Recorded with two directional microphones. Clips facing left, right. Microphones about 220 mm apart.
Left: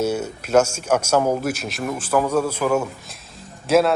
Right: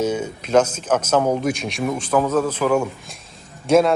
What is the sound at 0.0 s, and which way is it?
A man's voice, 10° left (ahead or behind).